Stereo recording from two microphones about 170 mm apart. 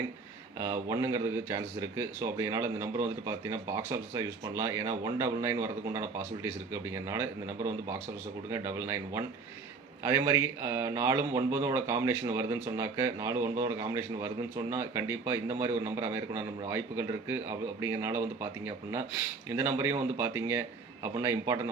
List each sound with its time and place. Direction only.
0.6 s speech: 15° right (ahead or behind)